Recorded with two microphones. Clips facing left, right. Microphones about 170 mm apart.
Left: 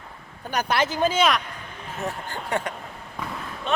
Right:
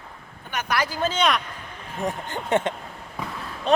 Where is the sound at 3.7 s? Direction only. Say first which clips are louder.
Right 6 dB; 35° right (ahead or behind).